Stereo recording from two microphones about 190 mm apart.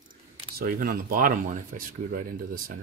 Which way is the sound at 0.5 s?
50° right (ahead or behind).